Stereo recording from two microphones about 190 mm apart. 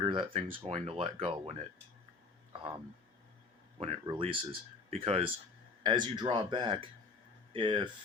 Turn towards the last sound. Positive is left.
turn(degrees=-25)  # may be behind; listen again after turning